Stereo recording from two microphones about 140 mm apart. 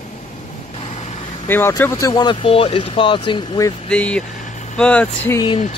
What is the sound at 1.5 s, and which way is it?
Speech, 15° left (ahead or behind).